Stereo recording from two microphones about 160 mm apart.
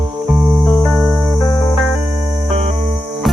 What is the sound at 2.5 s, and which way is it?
Music, 40° right (ahead or behind).